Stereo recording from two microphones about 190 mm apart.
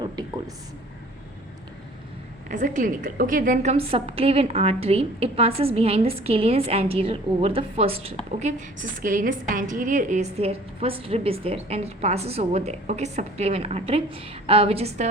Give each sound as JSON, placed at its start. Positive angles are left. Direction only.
{"t": 2.5, "sound": "a woman's voice", "side_deg": -40}